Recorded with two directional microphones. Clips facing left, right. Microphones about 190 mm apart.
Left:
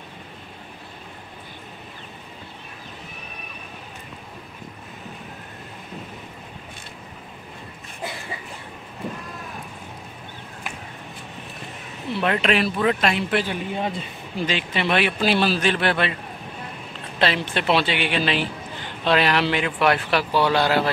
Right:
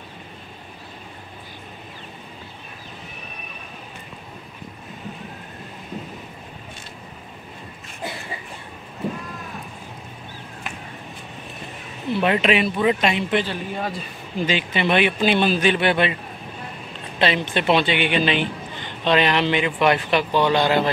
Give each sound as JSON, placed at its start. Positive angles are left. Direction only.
{"t": 12.1, "sound": "speech", "side_deg": -5}
{"t": 13.5, "sound": "speech", "side_deg": 20}
{"t": 14.4, "sound": "speech", "side_deg": 0}
{"t": 17.2, "sound": "speech", "side_deg": 0}